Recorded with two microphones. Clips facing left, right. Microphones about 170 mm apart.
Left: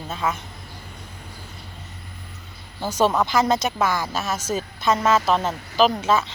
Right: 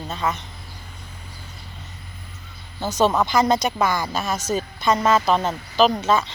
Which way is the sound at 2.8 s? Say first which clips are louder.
Right 1 dB; 10° left (ahead or behind).